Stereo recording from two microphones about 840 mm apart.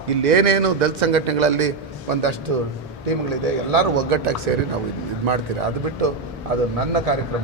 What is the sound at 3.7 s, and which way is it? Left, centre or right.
Speech, right.